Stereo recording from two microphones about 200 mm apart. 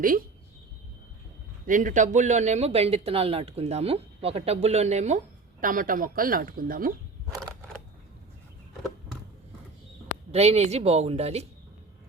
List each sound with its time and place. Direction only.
0.0 s speech: 45° right (ahead or behind)
1.6 s speech: 40° right (ahead or behind)
10.3 s speech: 30° right (ahead or behind)